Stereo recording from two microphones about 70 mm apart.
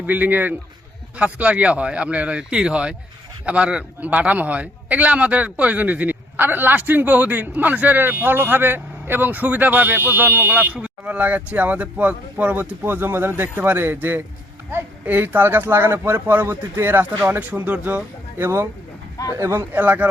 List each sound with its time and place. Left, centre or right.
0.0 s a man's voice: right
12.8 s a man's voice: right
19.8 s a man's voice: right